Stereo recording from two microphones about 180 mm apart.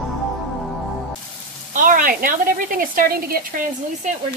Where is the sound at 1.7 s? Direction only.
50° right (ahead or behind).